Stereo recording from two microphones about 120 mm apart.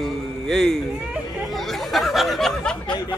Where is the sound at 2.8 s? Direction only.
40° left (ahead or behind).